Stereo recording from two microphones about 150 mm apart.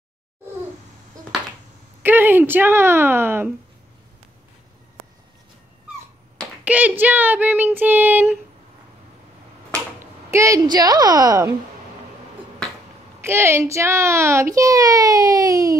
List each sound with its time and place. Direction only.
2.0 s speech: 15° right (ahead or behind)
6.6 s speech: 10° right (ahead or behind)
10.3 s a child's voice: 20° right (ahead or behind)
13.2 s a child's voice: 15° right (ahead or behind)